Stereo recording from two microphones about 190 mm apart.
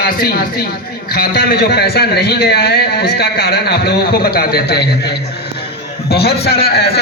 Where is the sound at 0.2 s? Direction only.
50° left (ahead or behind).